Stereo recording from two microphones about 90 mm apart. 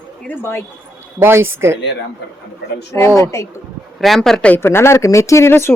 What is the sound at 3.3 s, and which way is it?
Speech, 35° left (ahead or behind).